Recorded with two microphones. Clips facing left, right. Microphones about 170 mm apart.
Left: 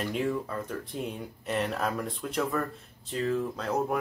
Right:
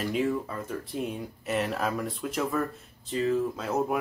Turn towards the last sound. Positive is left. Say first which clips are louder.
# right 1 dB
turn(degrees=-5)  # may be behind; listen again after turning